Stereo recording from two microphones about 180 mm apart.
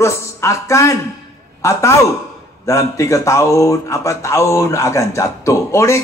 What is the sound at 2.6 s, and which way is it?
A man's voice, 15° left (ahead or behind).